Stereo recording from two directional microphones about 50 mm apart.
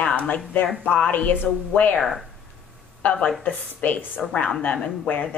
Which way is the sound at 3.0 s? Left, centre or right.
Left.